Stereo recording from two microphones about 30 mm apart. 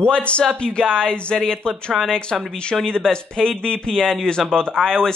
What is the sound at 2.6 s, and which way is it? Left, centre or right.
Speech, left.